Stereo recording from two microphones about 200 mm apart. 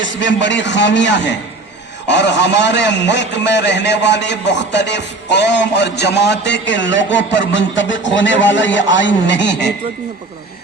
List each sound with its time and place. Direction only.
0.0 s a man's voice: 65° left (ahead or behind)